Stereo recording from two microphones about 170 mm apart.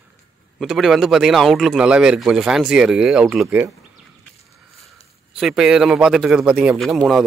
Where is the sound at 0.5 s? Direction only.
Centre (ahead or behind).